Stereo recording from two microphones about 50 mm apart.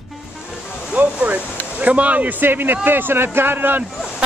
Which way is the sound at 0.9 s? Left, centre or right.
Right.